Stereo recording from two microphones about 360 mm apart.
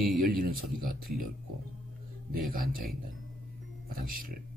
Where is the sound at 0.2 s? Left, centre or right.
Right.